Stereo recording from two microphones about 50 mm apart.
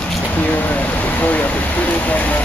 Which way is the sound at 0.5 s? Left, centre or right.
Left.